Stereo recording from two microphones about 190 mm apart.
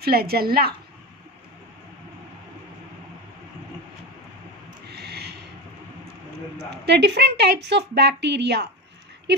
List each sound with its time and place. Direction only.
0.0 s a woman's voice: 55° right (ahead or behind)
4.8 s a sound: 60° right (ahead or behind)
6.7 s a woman's voice: 65° right (ahead or behind)